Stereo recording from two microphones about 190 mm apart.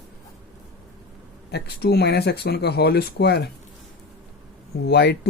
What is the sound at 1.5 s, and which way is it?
Speech, 60° left (ahead or behind).